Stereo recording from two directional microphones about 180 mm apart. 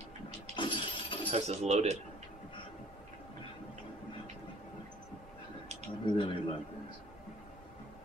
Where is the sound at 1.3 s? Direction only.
35° right (ahead or behind).